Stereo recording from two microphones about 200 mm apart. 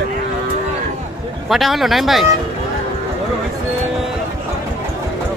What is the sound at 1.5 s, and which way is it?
Speech, centre (ahead or behind).